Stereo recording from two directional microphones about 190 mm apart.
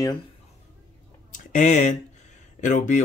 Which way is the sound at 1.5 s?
40° left (ahead or behind).